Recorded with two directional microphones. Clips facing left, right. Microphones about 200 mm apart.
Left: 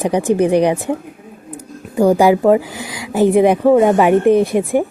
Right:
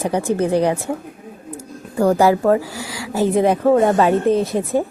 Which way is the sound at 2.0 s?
15° left (ahead or behind).